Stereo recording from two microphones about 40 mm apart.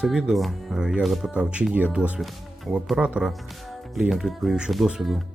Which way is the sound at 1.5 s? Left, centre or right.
Right.